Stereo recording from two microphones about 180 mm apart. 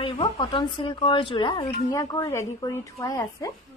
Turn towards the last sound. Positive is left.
turn(degrees=20)  # may be behind; listen again after turning